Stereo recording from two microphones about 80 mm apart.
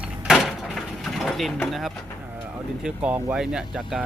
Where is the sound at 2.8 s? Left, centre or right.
Centre.